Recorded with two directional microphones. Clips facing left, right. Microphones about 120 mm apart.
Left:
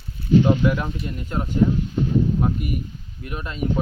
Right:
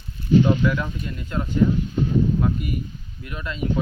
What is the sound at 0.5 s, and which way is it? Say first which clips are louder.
Speech: left 1 dB; 30° left (ahead or behind).